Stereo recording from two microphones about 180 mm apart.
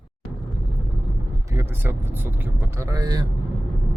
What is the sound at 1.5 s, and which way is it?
Speech, 10° right (ahead or behind).